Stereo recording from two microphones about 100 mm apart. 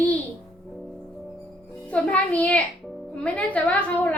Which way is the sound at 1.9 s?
10° left (ahead or behind).